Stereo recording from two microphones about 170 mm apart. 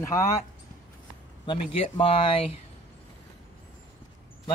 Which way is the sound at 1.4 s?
30° left (ahead or behind).